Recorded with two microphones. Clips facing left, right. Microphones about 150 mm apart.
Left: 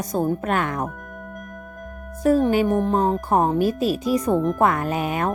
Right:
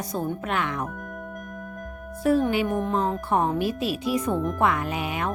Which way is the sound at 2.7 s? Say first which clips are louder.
Left 5 dB; centre (ahead or behind).